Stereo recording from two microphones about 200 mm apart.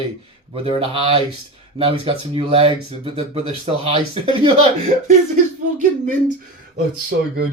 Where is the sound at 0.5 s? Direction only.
25° right (ahead or behind).